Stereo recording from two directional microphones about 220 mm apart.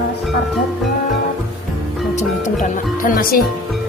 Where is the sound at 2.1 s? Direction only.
35° left (ahead or behind).